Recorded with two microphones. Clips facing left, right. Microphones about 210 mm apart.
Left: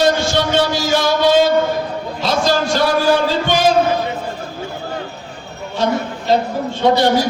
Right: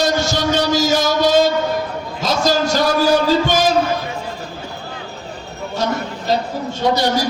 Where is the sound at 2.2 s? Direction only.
45° right (ahead or behind).